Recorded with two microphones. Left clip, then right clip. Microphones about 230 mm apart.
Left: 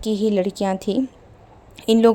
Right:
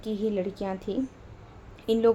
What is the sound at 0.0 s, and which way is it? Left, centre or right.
Speech, left.